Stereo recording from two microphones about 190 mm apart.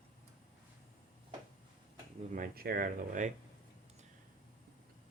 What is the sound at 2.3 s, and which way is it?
Speech, 50° right (ahead or behind).